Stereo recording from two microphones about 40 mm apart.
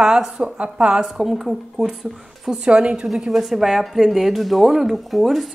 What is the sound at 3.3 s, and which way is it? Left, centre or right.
A woman's voice, centre.